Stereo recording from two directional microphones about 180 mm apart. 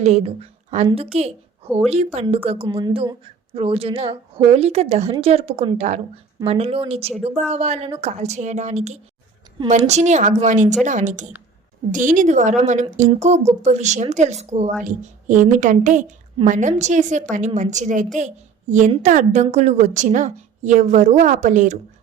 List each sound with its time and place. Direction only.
0.0 s a woman's voice: 35° right (ahead or behind)